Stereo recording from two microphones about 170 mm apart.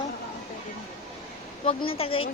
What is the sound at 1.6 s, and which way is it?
Speech, 35° left (ahead or behind).